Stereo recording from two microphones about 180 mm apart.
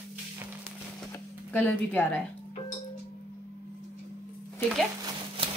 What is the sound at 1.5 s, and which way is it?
Speech, 10° left (ahead or behind).